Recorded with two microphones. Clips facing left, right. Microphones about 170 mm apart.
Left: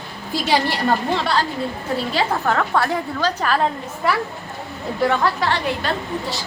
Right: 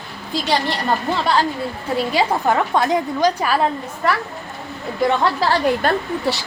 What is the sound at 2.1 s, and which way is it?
A woman's voice, 15° right (ahead or behind).